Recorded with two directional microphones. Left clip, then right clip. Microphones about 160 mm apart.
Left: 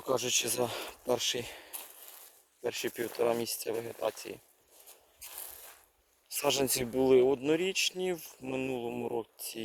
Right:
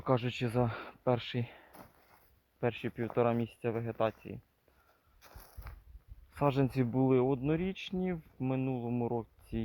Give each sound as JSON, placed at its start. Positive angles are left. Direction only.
{"t": 0.0, "sound": "speech", "side_deg": 25}
{"t": 5.3, "sound": "biting", "side_deg": -55}
{"t": 6.3, "sound": "speech", "side_deg": 45}